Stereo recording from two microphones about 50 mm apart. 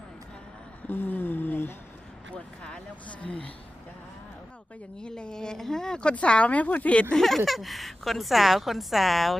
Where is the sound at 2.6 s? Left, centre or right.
Left.